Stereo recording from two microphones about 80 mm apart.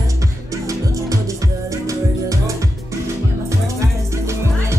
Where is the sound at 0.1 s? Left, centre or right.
Right.